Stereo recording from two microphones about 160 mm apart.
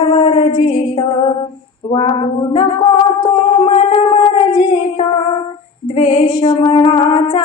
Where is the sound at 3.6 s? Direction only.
35° left (ahead or behind).